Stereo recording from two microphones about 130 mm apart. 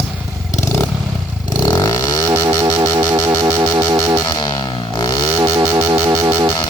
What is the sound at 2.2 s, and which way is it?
Music, 25° right (ahead or behind).